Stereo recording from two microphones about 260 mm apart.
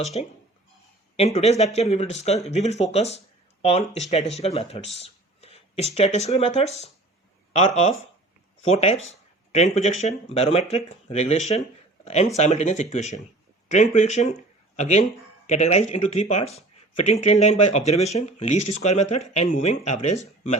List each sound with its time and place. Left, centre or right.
0.1 s speech: left